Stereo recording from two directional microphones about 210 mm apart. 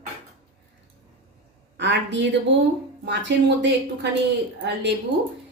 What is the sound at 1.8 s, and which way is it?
A woman's voice, 55° right (ahead or behind).